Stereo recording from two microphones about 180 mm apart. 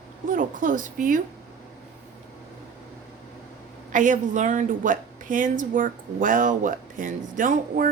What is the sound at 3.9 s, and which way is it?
A woman's voice, 45° right (ahead or behind).